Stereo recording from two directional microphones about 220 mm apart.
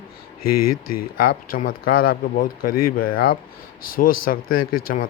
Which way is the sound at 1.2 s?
40° left (ahead or behind).